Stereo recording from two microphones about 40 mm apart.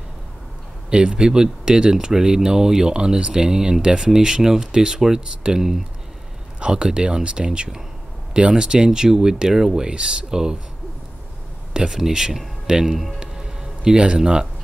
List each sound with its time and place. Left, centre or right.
0.8 s speech: right
6.6 s speech: right
9.8 s speech: right
11.9 s speech: centre
13.2 s music: centre